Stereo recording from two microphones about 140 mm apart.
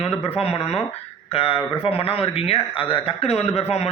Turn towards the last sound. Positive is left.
turn(degrees=45)  # may be behind; listen again after turning